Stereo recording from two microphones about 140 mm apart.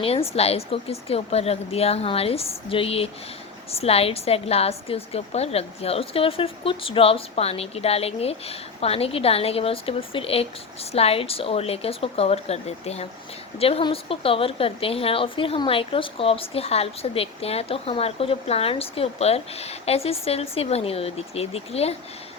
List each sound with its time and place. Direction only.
0.0 s a woman's voice: 45° left (ahead or behind)